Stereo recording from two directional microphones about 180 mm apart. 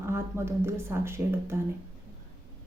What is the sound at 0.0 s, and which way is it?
A woman's voice, 15° right (ahead or behind).